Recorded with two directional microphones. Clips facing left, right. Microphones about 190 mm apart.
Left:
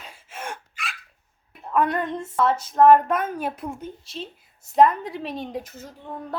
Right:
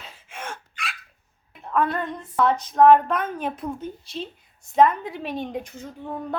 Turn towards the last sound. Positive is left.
turn(degrees=5)  # may be behind; listen again after turning